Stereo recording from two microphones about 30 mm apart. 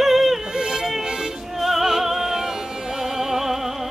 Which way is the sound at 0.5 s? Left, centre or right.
Right.